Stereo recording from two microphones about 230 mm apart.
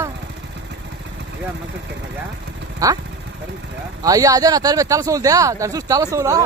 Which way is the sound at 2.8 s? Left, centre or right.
Centre.